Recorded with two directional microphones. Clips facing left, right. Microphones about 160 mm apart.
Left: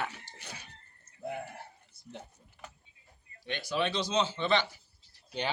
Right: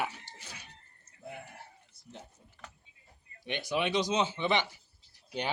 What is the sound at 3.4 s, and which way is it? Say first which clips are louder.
Speech: even; 20° right (ahead or behind).